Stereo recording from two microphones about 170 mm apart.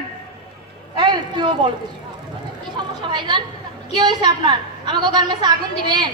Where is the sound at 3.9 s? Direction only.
25° right (ahead or behind).